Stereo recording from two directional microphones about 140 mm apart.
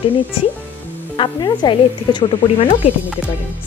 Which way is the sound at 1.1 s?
35° left (ahead or behind).